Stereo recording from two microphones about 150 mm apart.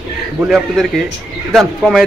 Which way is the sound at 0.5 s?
Centre (ahead or behind).